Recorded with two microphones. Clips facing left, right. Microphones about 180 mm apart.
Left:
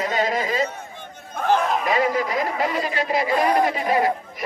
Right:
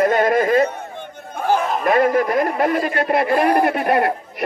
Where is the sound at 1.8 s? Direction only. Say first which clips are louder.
Right 5 dB; 55° right (ahead or behind).